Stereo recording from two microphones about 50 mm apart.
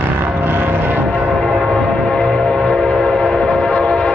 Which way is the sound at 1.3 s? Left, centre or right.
Centre.